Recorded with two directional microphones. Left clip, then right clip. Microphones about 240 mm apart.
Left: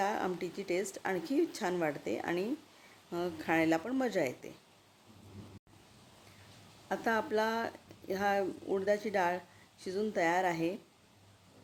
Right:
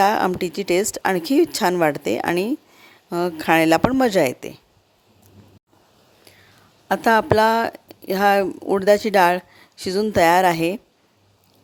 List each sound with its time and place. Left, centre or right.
0.0 s speech: right
6.8 s speech: right